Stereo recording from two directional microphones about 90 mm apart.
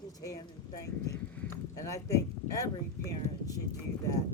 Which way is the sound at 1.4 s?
35° left (ahead or behind).